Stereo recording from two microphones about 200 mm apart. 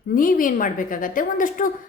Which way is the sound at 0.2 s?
45° left (ahead or behind).